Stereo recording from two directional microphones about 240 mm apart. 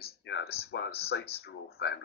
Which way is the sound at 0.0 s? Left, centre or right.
Left.